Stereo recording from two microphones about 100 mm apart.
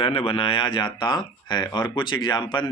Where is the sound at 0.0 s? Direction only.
70° left (ahead or behind).